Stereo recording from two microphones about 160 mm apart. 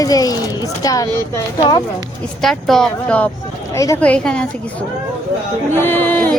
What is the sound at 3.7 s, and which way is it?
Speech, 20° left (ahead or behind).